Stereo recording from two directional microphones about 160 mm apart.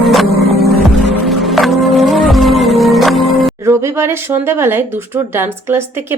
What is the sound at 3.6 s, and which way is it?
A woman's voice, 15° right (ahead or behind).